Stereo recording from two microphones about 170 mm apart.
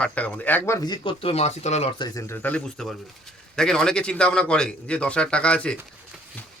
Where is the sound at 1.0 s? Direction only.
35° left (ahead or behind).